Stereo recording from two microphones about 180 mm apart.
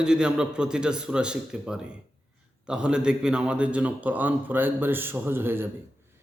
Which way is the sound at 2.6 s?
5° right (ahead or behind).